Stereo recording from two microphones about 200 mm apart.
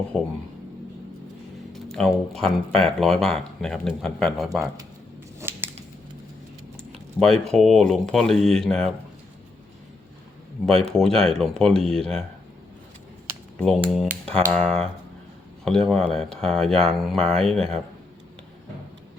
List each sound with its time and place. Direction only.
0.1 s speech: centre (ahead or behind)
1.7 s speech: centre (ahead or behind)
5.4 s a sound: 10° right (ahead or behind)
6.9 s speech: 5° left (ahead or behind)
10.8 s speech: 5° left (ahead or behind)
13.6 s speech: centre (ahead or behind)